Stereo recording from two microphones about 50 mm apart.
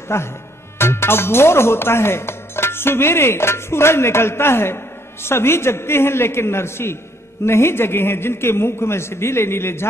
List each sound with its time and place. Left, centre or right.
0.1 s speech: left